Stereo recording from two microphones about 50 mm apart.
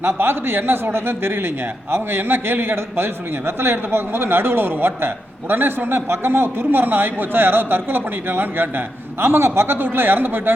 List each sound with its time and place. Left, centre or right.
0.0 s a man's voice: right
9.2 s a man's voice: right